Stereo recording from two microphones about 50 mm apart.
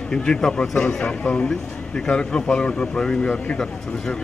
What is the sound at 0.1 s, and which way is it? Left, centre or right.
A man's voice, centre.